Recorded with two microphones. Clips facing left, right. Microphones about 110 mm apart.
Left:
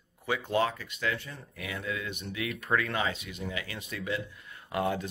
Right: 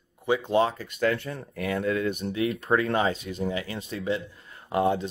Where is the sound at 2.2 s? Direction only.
30° right (ahead or behind).